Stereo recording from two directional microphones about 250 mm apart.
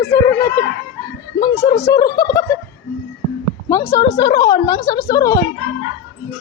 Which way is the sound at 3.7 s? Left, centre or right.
Centre.